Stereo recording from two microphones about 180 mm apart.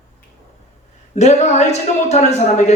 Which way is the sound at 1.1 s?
40° left (ahead or behind).